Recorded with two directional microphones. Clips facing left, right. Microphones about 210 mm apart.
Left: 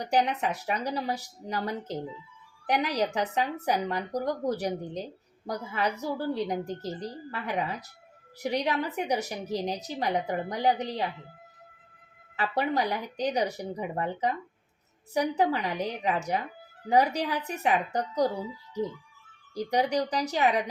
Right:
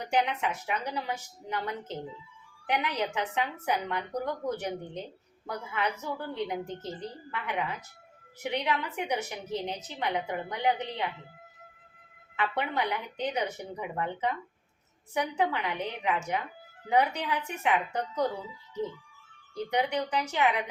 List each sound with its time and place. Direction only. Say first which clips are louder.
0.0 s a woman's voice: left 2 dB; 35° left (ahead or behind)
12.4 s a woman's voice: left 3 dB; 35° left (ahead or behind)
19.5 s a woman's voice: left 3 dB; 35° left (ahead or behind)